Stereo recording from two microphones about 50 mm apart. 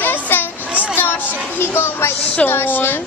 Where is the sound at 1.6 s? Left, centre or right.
Left.